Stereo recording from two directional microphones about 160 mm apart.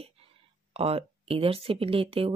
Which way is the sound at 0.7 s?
35° right (ahead or behind).